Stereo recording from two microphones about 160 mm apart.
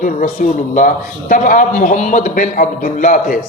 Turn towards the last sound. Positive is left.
turn(degrees=55)  # may be behind; listen again after turning